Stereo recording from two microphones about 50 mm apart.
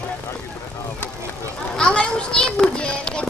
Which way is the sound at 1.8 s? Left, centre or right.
Centre.